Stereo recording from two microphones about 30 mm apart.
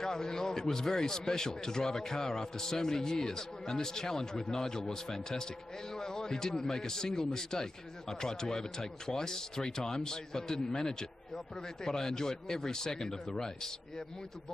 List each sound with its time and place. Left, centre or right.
0.0 s a man's voice: left